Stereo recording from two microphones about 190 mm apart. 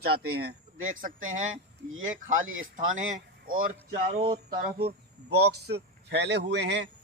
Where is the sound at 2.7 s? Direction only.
40° right (ahead or behind).